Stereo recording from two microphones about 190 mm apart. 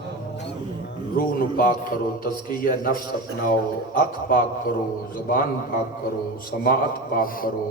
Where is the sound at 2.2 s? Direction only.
50° left (ahead or behind).